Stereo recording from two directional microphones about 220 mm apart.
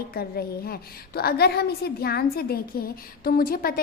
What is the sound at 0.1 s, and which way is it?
A woman's voice, 45° left (ahead or behind).